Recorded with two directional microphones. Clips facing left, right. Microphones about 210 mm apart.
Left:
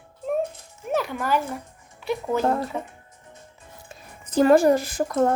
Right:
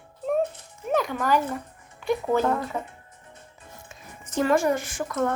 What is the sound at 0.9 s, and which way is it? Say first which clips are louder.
Speech: right 1 dB; 5° left (ahead or behind).